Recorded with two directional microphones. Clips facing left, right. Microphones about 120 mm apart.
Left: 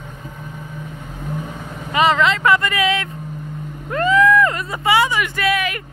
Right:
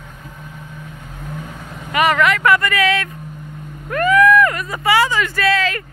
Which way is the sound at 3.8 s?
25° left (ahead or behind).